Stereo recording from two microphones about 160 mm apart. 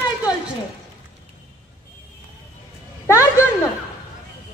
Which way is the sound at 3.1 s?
20° left (ahead or behind).